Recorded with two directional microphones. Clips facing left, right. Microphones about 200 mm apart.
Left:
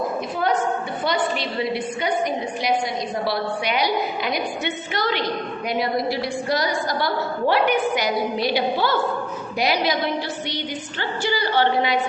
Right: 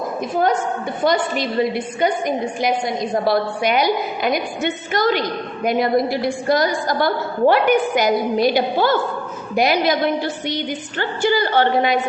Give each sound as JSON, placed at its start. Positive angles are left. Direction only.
{"t": 1.0, "sound": "a woman's voice", "side_deg": -45}